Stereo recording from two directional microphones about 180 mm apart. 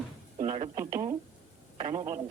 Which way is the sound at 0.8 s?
15° right (ahead or behind).